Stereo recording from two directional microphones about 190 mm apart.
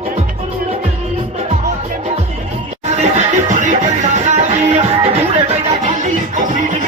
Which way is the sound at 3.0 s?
35° right (ahead or behind).